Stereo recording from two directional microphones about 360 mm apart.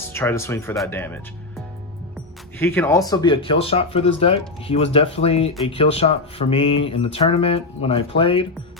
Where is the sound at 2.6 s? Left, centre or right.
Centre.